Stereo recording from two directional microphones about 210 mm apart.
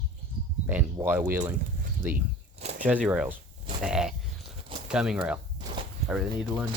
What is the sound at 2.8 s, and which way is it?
Speech, 5° right (ahead or behind).